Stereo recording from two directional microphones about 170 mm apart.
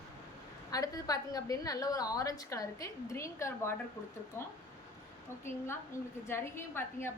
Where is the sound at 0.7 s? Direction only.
20° left (ahead or behind).